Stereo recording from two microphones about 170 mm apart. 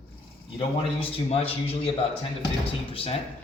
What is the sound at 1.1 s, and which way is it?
Speech, 35° left (ahead or behind).